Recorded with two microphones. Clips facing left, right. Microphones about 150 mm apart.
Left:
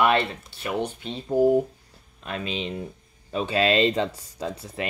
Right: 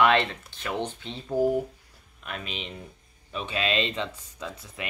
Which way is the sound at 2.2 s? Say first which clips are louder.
Left 6 dB; 30° left (ahead or behind).